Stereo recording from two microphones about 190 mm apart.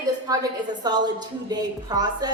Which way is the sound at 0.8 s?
20° right (ahead or behind).